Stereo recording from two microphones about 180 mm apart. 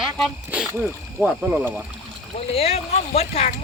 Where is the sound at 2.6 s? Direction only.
35° left (ahead or behind).